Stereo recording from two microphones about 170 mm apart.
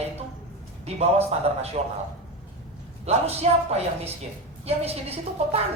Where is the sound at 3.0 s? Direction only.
40° right (ahead or behind).